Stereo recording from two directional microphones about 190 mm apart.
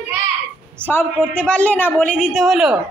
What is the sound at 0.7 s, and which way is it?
A woman's voice, 10° left (ahead or behind).